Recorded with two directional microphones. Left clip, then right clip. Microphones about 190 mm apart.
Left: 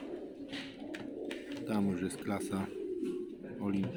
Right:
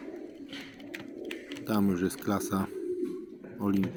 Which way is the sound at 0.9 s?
35° right (ahead or behind).